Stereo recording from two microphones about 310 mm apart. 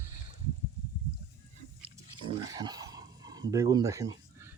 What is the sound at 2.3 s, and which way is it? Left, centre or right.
Dog, centre.